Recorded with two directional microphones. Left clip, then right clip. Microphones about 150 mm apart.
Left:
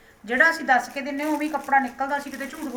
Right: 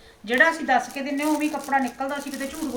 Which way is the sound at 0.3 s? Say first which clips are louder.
Even; 10° left (ahead or behind).